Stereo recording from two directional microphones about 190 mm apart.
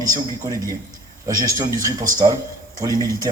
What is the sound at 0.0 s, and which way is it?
A man's voice, 20° right (ahead or behind).